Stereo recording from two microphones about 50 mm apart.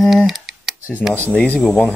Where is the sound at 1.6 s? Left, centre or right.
Centre.